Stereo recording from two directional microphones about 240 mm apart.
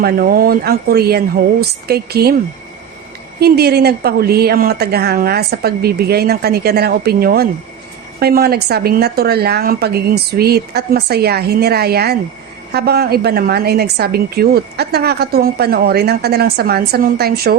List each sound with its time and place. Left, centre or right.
0.0 s a woman's voice: right
3.4 s a woman's voice: right